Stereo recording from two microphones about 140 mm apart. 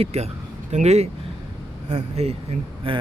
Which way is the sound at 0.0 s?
50° right (ahead or behind).